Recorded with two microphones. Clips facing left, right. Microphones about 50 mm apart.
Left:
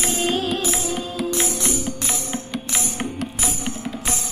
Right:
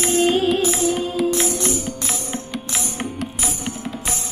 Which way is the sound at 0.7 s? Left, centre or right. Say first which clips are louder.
Right 5 dB; centre.